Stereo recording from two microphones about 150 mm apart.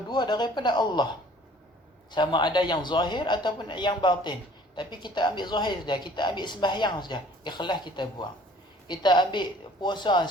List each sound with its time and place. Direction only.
0.1 s speech: 30° left (ahead or behind)
2.0 s a man's voice: 30° left (ahead or behind)